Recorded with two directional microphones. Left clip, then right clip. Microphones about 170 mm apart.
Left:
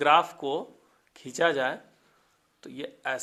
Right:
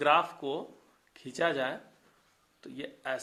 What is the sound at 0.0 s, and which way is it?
Speech, 40° left (ahead or behind).